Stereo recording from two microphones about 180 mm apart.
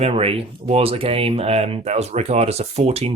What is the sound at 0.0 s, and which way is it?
Speech, 35° right (ahead or behind).